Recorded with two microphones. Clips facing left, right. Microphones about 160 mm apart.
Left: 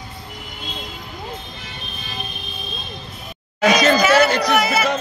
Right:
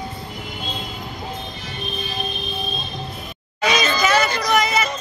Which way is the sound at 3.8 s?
65° left (ahead or behind).